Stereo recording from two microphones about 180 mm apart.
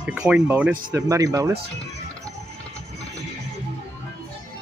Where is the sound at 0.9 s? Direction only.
20° right (ahead or behind).